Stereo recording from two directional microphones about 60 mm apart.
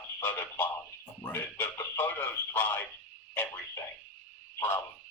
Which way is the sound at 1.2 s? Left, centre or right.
Left.